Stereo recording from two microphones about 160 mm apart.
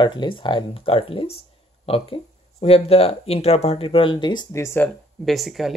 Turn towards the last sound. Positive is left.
turn(degrees=0)  # may be behind; listen again after turning